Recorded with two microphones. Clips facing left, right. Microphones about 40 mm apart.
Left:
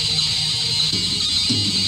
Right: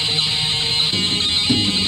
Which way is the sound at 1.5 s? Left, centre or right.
Right.